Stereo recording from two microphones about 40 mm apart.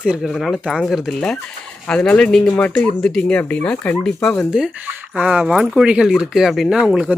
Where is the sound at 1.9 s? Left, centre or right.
Left.